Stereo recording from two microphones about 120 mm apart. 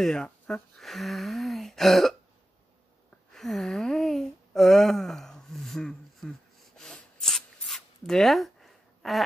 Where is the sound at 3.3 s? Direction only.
Centre (ahead or behind).